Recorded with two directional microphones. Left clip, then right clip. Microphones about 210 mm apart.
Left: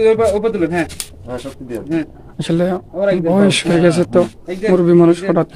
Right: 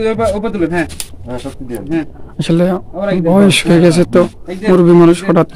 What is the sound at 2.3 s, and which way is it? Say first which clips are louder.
A man's voice: right 3 dB; 15° right (ahead or behind).